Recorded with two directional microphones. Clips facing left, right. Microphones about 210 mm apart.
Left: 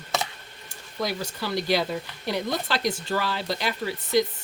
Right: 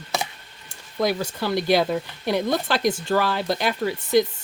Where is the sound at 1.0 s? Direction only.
55° right (ahead or behind).